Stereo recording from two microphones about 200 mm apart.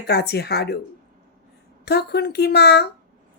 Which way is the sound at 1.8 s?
55° left (ahead or behind).